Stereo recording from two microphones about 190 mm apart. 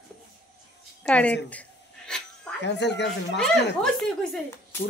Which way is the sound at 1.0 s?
5° left (ahead or behind).